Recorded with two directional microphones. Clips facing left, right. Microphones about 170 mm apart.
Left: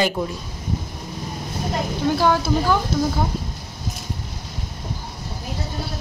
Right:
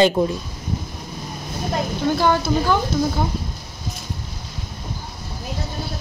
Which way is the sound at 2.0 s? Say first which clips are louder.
Even; 5° left (ahead or behind).